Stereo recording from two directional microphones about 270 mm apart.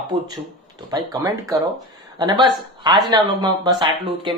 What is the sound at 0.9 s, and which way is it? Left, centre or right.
Speech, centre.